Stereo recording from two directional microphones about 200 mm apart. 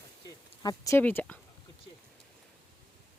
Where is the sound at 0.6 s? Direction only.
15° left (ahead or behind).